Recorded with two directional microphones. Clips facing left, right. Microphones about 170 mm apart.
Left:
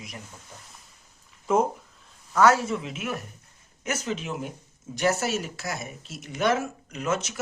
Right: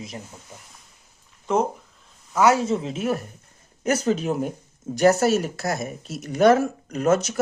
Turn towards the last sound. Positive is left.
turn(degrees=-40)  # may be behind; listen again after turning